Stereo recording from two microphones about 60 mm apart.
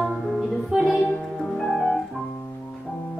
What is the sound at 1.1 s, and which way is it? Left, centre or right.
Music, centre.